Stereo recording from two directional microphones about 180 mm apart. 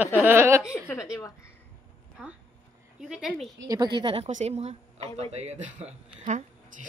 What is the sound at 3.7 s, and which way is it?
Speech, 25° right (ahead or behind).